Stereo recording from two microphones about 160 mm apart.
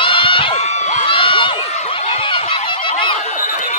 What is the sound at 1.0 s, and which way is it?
Crowd, 35° left (ahead or behind).